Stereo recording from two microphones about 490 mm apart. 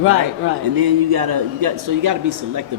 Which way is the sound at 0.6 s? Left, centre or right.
Right.